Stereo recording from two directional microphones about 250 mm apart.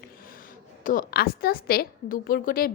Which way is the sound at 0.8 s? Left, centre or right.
Left.